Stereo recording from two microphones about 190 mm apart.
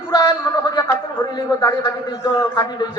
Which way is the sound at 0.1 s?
20° left (ahead or behind).